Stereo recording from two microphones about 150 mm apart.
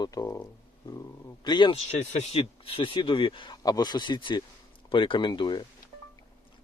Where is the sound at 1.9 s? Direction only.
50° left (ahead or behind).